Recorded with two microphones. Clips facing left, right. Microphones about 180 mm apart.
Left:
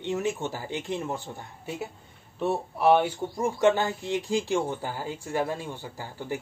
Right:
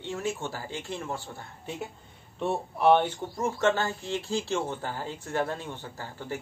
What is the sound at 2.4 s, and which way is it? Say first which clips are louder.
Speech: left 1 dB; 5° left (ahead or behind).